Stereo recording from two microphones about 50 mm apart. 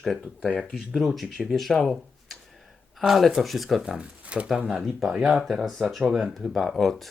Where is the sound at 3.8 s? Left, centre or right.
Centre.